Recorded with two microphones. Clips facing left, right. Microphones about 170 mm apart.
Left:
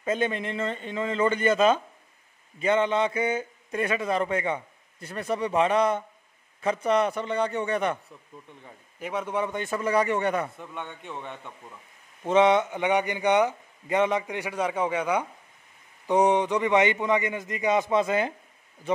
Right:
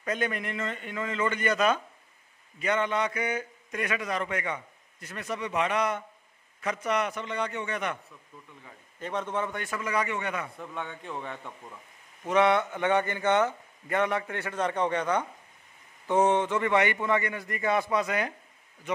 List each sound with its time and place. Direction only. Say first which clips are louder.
0.0 s a man's voice: left 4 dB; 25° left (ahead or behind)
9.0 s a man's voice: left 2 dB; 10° left (ahead or behind)
9.8 s a man's voice: left 6 dB; 35° left (ahead or behind)
10.5 s a man's voice: right 1 dB; centre (ahead or behind)
12.3 s a man's voice: left 3 dB; 20° left (ahead or behind)